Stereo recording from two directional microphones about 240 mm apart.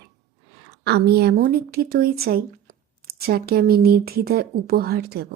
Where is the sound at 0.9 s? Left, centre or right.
Right.